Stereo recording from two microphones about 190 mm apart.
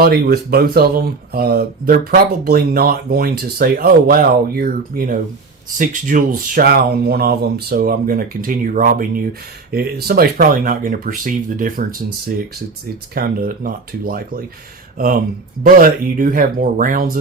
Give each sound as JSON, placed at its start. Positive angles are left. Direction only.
{"t": 0.0, "sound": "speech", "side_deg": -55}
{"t": 13.1, "sound": "speech", "side_deg": -50}